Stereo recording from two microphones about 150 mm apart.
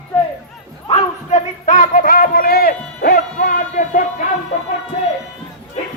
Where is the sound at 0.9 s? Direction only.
50° left (ahead or behind); by 4.0 s 65° left (ahead or behind).